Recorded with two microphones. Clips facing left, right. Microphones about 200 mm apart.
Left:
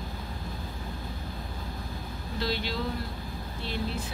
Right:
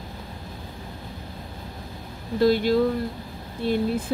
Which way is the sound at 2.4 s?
50° right (ahead or behind).